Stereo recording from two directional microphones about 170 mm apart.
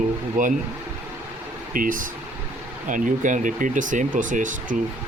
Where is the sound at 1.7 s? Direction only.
55° right (ahead or behind).